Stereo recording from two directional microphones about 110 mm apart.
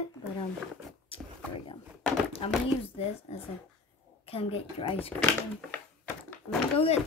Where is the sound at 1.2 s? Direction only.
20° right (ahead or behind).